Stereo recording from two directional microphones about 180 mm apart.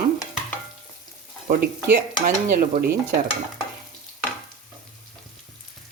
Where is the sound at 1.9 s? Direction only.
50° right (ahead or behind).